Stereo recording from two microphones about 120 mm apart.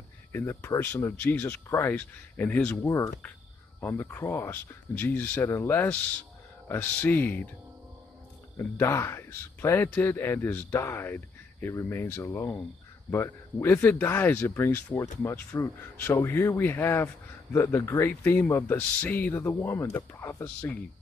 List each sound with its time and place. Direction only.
0.3 s a man's voice: 15° left (ahead or behind)
8.5 s a man's voice: 20° left (ahead or behind)